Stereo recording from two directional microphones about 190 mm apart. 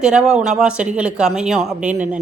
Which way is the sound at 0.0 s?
5° right (ahead or behind).